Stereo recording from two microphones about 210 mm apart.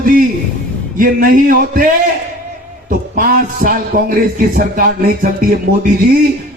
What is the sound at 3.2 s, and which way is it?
A man's voice, 45° right (ahead or behind).